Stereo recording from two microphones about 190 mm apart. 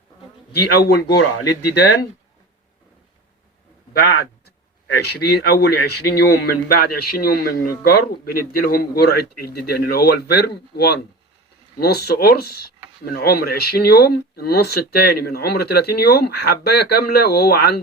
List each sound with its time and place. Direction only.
0.5 s a man's voice: 60° left (ahead or behind)
3.9 s a man's voice: 55° left (ahead or behind)